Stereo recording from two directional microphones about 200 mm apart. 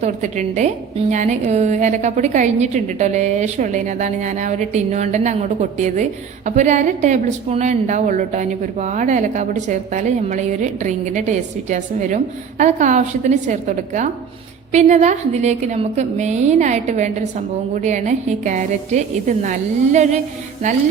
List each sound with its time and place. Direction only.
0.0 s a woman's voice: 35° right (ahead or behind)